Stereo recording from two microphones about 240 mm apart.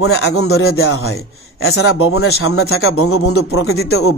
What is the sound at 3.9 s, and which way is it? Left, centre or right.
Speech, left.